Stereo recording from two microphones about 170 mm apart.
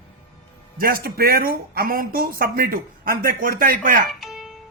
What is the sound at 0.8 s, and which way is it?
Speech, 60° right (ahead or behind).